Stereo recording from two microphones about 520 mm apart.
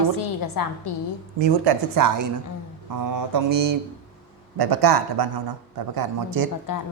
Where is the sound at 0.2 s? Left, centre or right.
Left.